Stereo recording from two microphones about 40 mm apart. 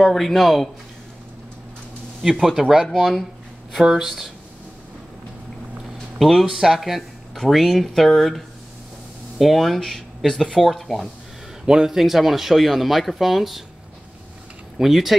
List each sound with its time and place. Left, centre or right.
0.0 s speech: centre
2.8 s speech: centre
3.8 s a man's voice: centre
6.1 s speech: centre
9.4 s speech: centre
11.6 s a man's voice: centre
12.0 s speech: centre
14.8 s speech: centre